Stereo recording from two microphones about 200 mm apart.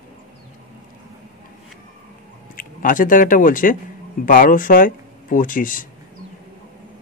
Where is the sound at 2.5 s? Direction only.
45° left (ahead or behind).